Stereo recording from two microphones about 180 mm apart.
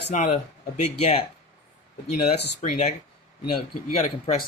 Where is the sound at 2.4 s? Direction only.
65° left (ahead or behind).